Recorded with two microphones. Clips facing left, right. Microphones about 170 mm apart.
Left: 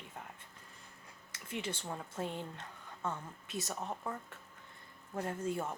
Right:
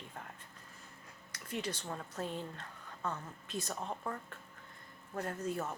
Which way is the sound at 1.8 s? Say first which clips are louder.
Left 1 dB; 10° left (ahead or behind).